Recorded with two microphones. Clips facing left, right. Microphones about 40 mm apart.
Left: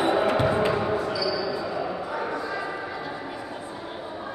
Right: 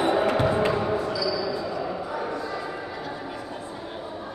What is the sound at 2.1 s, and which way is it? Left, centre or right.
Bow-wow, centre.